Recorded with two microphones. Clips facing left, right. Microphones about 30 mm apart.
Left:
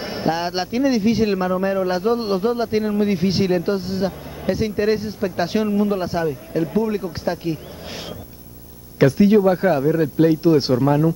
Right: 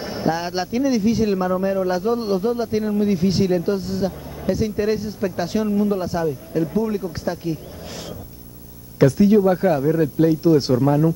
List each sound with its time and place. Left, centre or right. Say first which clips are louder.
0.0 s speech: left 1 dB; left
9.0 s speech: left 1 dB; left